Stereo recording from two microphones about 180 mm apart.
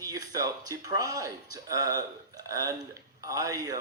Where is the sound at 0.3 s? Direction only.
20° right (ahead or behind).